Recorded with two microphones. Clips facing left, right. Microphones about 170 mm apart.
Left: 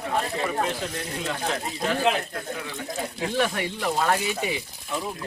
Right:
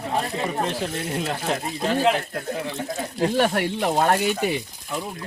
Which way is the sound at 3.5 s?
55° right (ahead or behind).